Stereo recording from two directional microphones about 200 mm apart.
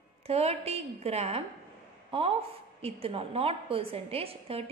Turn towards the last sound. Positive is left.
turn(degrees=-30)  # may be behind; listen again after turning